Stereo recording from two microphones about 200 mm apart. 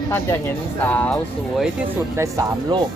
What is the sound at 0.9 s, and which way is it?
Speech, 10° left (ahead or behind).